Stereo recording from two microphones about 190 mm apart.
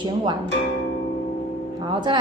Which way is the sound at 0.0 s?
25° right (ahead or behind).